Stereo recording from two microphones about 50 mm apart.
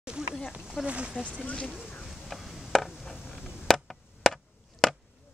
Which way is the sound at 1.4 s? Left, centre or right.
Left.